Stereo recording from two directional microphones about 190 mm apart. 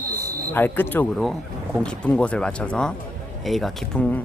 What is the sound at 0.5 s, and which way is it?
Speech, 10° left (ahead or behind).